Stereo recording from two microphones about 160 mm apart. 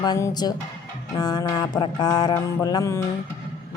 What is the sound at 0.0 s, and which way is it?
Music, 25° left (ahead or behind).